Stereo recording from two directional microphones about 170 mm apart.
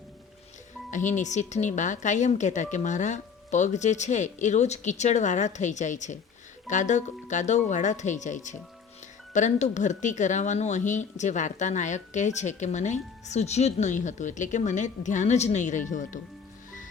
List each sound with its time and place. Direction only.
0.9 s speech: 45° left (ahead or behind)